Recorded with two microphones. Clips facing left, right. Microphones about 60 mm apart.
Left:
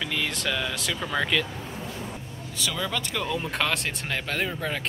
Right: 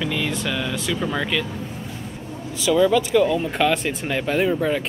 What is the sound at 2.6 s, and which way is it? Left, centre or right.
Speech, centre.